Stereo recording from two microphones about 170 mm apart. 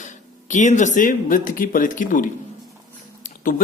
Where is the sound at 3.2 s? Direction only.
55° left (ahead or behind).